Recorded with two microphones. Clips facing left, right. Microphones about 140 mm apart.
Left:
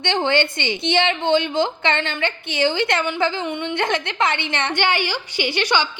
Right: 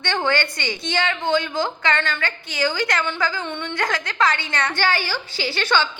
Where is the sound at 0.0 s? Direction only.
20° left (ahead or behind).